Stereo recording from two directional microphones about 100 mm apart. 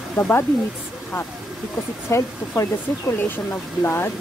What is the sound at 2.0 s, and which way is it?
Speech, 30° left (ahead or behind).